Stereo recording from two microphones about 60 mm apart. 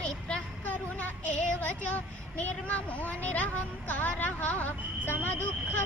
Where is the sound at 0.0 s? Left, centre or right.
Centre.